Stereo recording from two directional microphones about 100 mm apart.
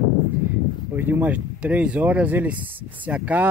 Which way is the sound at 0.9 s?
20° right (ahead or behind).